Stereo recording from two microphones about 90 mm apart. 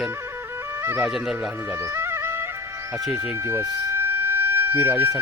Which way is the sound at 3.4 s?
25° right (ahead or behind).